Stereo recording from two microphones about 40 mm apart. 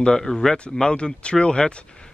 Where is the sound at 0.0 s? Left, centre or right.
Centre.